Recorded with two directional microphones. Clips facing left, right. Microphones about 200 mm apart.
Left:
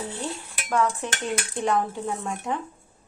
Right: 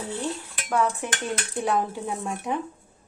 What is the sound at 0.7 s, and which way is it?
Speech, 15° right (ahead or behind).